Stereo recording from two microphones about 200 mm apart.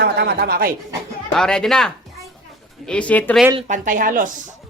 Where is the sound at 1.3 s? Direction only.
5° left (ahead or behind).